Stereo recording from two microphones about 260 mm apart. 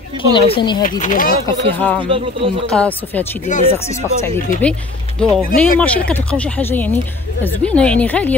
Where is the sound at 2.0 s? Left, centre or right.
Centre.